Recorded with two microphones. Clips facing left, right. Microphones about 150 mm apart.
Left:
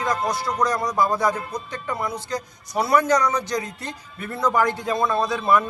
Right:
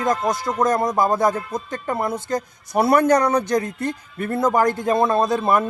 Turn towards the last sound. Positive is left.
turn(degrees=-45)  # may be behind; listen again after turning